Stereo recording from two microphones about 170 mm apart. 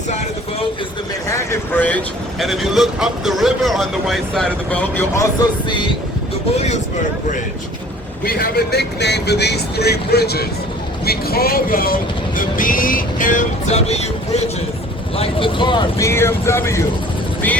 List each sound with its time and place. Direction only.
1.3 s speech: 15° left (ahead or behind)
8.2 s speech: 65° left (ahead or behind)
12.4 s music: 55° left (ahead or behind)
15.2 s speech: 30° left (ahead or behind)
16.0 s speech: 15° left (ahead or behind)